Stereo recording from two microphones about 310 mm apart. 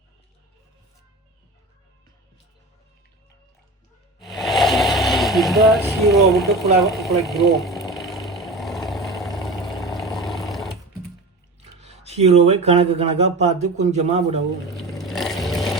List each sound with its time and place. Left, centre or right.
4.2 s vehicle: centre
6.5 s speech: centre
6.8 s speech: centre
7.5 s vehicle: centre
11.6 s speech: right
14.7 s vehicle: centre